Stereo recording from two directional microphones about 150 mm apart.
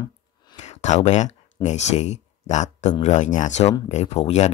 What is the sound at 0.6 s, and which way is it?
Speech, 50° left (ahead or behind).